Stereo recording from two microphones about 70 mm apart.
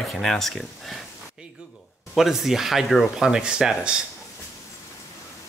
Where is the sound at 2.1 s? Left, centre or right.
Centre.